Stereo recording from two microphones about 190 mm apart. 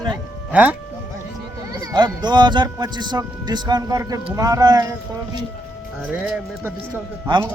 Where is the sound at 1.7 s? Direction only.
20° right (ahead or behind).